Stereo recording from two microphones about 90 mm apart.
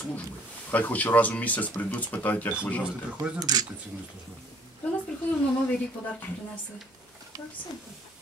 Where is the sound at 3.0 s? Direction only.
15° right (ahead or behind).